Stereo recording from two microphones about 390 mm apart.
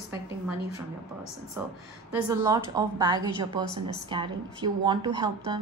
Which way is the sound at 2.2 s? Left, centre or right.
Centre.